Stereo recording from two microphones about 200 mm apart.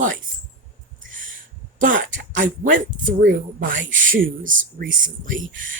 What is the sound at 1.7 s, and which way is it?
Speech, 40° right (ahead or behind).